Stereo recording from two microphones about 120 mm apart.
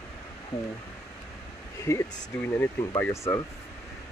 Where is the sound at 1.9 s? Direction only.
25° left (ahead or behind).